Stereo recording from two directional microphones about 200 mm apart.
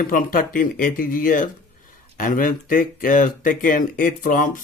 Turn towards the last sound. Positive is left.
turn(degrees=40)  # may be behind; listen again after turning